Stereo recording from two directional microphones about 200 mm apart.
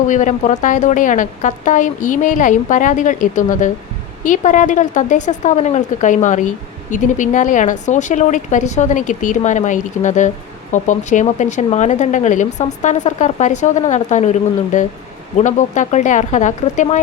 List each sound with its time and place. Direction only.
0.1 s a woman's voice: 40° left (ahead or behind)
15.4 s a woman's voice: 35° left (ahead or behind)